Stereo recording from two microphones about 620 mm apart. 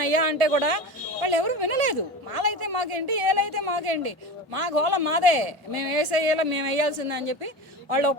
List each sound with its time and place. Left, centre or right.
0.0 s a man's voice: right
4.9 s a woman's voice: right
7.9 s a woman's voice: right